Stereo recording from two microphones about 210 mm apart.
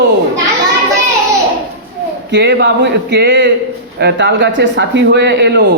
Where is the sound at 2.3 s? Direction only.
55° right (ahead or behind).